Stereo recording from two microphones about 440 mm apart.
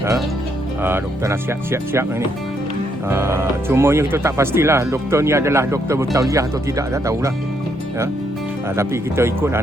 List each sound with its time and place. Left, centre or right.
0.8 s speech: centre
8.7 s speech: centre